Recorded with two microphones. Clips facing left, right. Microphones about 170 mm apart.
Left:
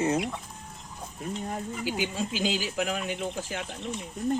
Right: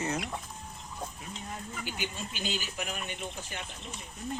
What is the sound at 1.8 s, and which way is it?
Speech, 90° left.